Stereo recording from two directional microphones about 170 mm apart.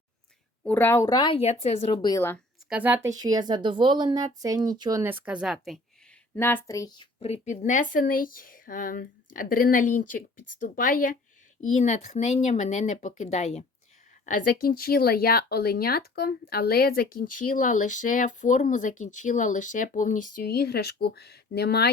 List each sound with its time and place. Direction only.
0.6 s speech: 10° left (ahead or behind)
2.6 s a woman's voice: 10° right (ahead or behind)
3.2 s speech: 20° right (ahead or behind); by 5.8 s centre (ahead or behind)
6.3 s a woman's voice: 10° left (ahead or behind); by 13.7 s 40° left (ahead or behind)
14.3 s speech: 55° left (ahead or behind); by 21.8 s 70° left (ahead or behind)